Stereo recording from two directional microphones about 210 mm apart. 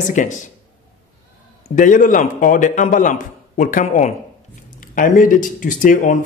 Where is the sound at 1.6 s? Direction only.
35° left (ahead or behind).